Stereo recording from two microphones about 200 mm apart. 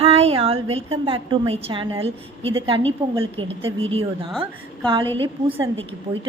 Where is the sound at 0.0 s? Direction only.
30° right (ahead or behind).